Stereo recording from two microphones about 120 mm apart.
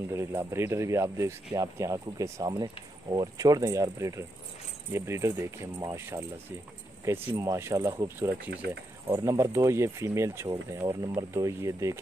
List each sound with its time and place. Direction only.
0.1 s speech: 20° right (ahead or behind)